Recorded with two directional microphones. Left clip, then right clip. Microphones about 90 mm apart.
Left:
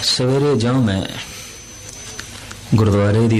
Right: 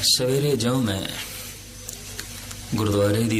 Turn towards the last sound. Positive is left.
turn(degrees=-35)  # may be behind; listen again after turning